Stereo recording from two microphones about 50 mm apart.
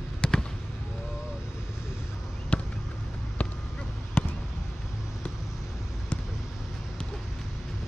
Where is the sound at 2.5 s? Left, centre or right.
Left.